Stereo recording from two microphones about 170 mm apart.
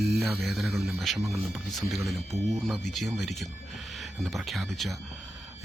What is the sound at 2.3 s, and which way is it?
Speech, 15° right (ahead or behind).